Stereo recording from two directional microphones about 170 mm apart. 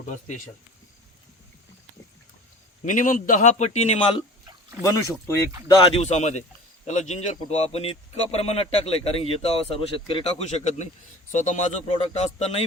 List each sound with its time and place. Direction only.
0.1 s a man's voice: 45° left (ahead or behind)
2.8 s a man's voice: 50° left (ahead or behind)
4.8 s speech: 20° left (ahead or behind)
5.9 s a man's voice: 40° left (ahead or behind)
10.4 s a man's voice: 40° left (ahead or behind)